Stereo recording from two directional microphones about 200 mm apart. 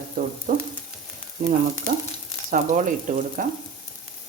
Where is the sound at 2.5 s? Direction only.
40° right (ahead or behind).